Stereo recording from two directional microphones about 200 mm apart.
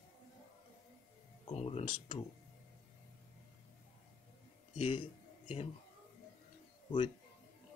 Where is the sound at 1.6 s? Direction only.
30° left (ahead or behind).